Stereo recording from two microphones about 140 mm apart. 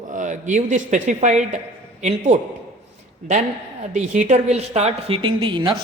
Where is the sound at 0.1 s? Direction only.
60° right (ahead or behind).